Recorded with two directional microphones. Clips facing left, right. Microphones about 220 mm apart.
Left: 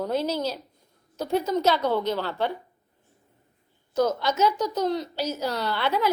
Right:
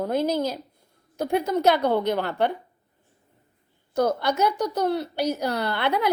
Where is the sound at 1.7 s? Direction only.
55° right (ahead or behind).